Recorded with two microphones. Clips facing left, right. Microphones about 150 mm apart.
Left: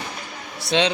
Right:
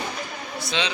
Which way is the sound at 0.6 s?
70° left (ahead or behind).